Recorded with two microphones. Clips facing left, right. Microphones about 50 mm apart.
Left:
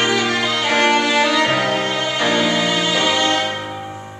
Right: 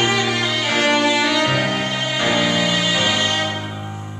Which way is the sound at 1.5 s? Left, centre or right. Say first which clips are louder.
Left 2 dB; left.